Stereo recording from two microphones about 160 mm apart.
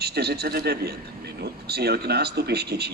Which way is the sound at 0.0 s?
90° right.